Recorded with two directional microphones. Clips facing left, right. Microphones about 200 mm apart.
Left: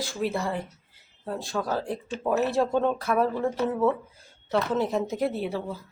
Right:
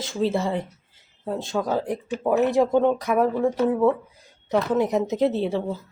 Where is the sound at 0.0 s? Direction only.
25° right (ahead or behind).